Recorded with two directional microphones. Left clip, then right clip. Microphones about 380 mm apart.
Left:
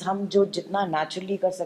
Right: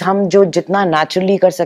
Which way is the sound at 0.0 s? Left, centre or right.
Right.